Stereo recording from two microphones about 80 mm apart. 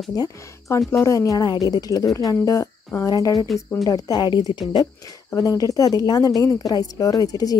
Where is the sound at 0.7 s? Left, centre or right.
Left.